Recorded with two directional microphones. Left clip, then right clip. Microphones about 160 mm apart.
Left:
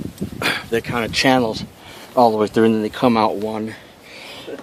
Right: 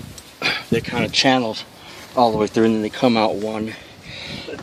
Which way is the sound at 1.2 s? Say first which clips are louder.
Left 1 dB; 35° left (ahead or behind).